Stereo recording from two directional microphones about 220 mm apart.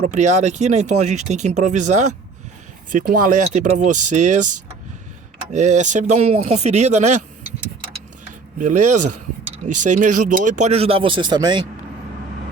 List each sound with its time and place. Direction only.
0.0 s speech: 35° right (ahead or behind)
8.5 s speech: 35° right (ahead or behind)